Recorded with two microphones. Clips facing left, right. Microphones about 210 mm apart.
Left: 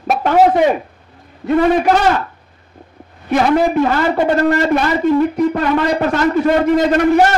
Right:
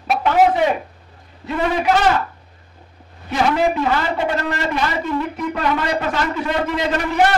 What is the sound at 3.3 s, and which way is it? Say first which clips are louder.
A man's voice: left 5 dB; 55° left (ahead or behind).